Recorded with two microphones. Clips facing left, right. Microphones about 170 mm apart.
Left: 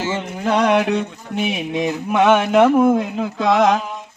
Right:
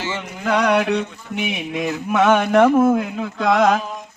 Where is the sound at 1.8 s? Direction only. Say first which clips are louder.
Left 1 dB; 15° left (ahead or behind).